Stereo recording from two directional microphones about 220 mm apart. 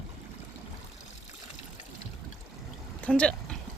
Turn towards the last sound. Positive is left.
turn(degrees=5)  # may be behind; listen again after turning